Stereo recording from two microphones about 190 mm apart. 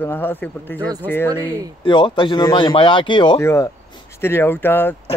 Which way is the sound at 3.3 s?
15° left (ahead or behind).